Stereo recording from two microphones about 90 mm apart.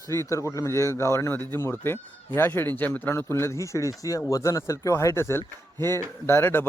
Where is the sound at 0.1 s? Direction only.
35° left (ahead or behind).